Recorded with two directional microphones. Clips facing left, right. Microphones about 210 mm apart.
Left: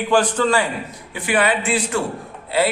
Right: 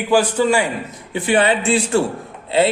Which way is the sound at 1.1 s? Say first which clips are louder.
Right 3 dB; 25° right (ahead or behind).